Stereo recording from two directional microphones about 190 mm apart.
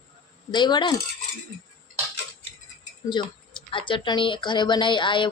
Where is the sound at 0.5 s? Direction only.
25° left (ahead or behind).